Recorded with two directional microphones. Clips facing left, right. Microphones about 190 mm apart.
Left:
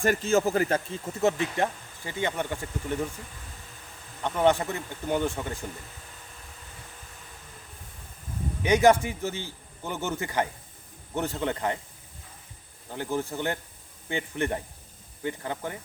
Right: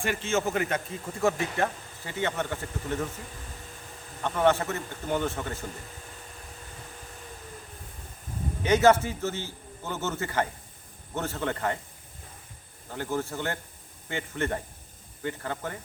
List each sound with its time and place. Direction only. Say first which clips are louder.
0.0 s a man's voice: left 4 dB; 40° left (ahead or behind)
1.2 s a man's voice: left 1 dB; 20° left (ahead or behind)
4.2 s a man's voice: left 1 dB; 15° left (ahead or behind)
8.6 s a man's voice: left 1 dB; 15° left (ahead or behind)
12.9 s a man's voice: left 1 dB; 15° left (ahead or behind)